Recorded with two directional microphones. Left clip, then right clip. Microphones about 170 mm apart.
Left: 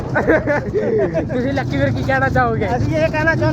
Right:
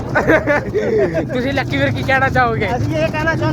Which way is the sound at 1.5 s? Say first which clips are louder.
Right 2 dB; 30° right (ahead or behind).